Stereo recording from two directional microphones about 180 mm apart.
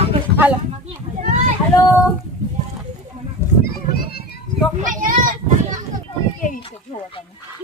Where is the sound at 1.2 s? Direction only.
45° right (ahead or behind).